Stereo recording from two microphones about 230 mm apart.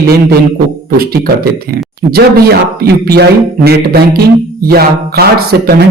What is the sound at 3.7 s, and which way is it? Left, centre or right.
Speech, right.